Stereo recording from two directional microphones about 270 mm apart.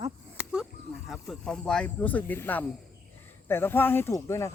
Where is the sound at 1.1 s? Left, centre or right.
Centre.